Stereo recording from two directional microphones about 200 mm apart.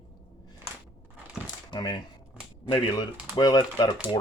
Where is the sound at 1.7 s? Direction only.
20° left (ahead or behind).